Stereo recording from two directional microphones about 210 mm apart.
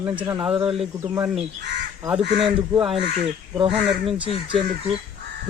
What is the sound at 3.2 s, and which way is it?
Speech, 25° right (ahead or behind).